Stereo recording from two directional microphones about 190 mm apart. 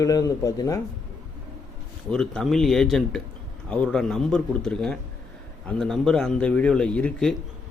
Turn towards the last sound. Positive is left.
turn(degrees=5)  # may be behind; listen again after turning